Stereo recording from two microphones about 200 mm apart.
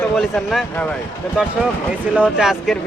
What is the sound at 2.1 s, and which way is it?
Speech, 5° right (ahead or behind).